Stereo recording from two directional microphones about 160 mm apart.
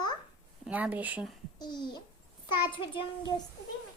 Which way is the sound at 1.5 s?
25° left (ahead or behind).